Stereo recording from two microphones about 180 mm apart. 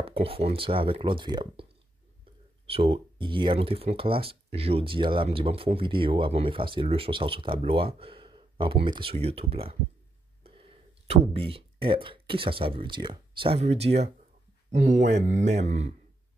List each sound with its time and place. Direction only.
0.0 s speech: 30° right (ahead or behind)
11.1 s speech: 30° right (ahead or behind)
15.4 s speech: 40° right (ahead or behind)